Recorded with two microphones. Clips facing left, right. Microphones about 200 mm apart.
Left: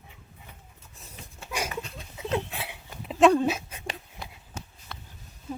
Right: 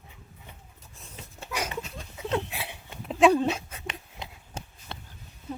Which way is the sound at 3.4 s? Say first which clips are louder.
Left 1 dB; 10° left (ahead or behind).